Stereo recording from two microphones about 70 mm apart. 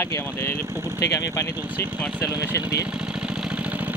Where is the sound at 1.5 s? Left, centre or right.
Right.